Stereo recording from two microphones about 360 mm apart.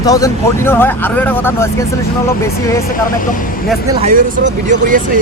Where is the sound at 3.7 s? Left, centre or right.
Centre.